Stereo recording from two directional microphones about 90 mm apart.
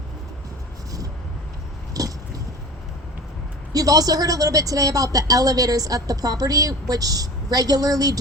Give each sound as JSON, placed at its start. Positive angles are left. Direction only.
{"t": 1.9, "sound": "biting", "side_deg": -40}
{"t": 3.7, "sound": "a woman's voice", "side_deg": -45}